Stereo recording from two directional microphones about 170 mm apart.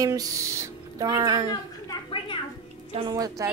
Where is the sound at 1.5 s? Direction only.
25° left (ahead or behind).